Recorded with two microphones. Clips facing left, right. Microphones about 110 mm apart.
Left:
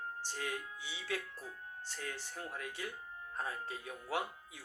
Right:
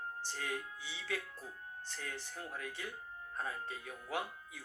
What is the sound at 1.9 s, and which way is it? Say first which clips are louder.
Speech: left 2 dB; 15° left (ahead or behind).